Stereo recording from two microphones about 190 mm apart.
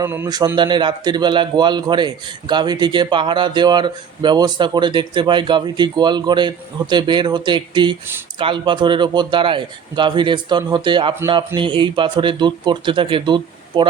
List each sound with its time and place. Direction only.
0.0 s a man's voice: 15° right (ahead or behind)